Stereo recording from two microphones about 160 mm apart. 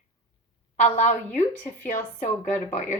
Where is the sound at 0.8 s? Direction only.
45° left (ahead or behind).